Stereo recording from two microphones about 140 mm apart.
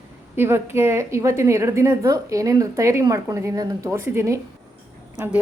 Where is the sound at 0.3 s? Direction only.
15° right (ahead or behind).